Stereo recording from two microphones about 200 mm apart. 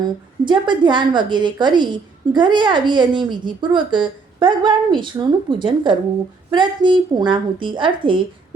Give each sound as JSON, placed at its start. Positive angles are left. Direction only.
{"t": 0.4, "sound": "a woman's voice", "side_deg": -25}